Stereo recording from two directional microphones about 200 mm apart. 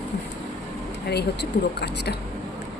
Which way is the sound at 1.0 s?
55° left (ahead or behind).